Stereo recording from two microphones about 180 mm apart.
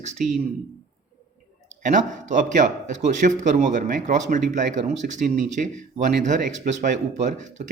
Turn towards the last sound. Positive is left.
turn(degrees=-40)  # may be behind; listen again after turning